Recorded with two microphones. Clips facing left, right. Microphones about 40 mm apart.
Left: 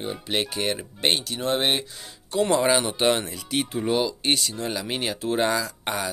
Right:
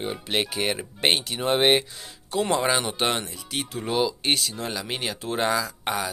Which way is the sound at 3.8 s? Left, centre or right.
Centre.